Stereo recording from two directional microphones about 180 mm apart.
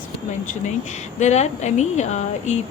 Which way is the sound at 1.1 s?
40° left (ahead or behind).